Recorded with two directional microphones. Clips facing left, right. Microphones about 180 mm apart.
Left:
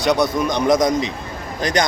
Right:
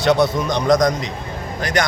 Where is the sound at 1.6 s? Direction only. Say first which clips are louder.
Left 1 dB; 20° left (ahead or behind).